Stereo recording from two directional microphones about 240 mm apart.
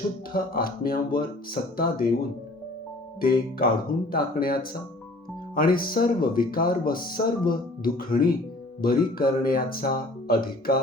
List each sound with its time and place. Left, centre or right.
0.3 s speech: left
3.2 s speech: left